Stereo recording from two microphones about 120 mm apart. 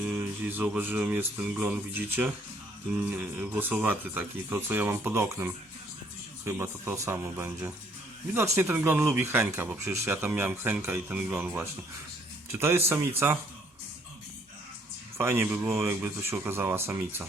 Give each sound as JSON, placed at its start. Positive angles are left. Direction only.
{"t": 0.0, "sound": "speech", "side_deg": -15}
{"t": 15.2, "sound": "speech", "side_deg": -20}